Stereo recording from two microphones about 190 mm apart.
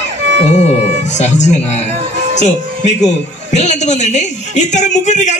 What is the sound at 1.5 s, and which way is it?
Speech, 35° left (ahead or behind).